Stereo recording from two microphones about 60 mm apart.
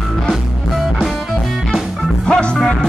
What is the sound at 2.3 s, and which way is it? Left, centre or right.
Music, centre.